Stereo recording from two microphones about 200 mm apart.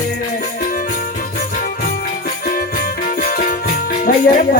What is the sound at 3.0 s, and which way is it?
Music, 40° left (ahead or behind).